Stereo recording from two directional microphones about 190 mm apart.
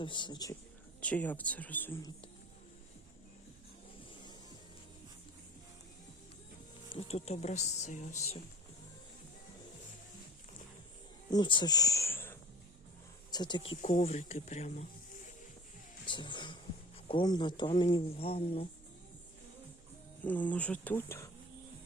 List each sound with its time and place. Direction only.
0.0 s speech: 25° left (ahead or behind)
1.0 s speech: 10° left (ahead or behind)
4.1 s music: 25° left (ahead or behind)
6.9 s speech: 35° left (ahead or behind)
11.3 s speech: 25° left (ahead or behind)
13.3 s speech: 25° left (ahead or behind)
16.0 s speech: 25° left (ahead or behind)
20.2 s speech: 10° left (ahead or behind)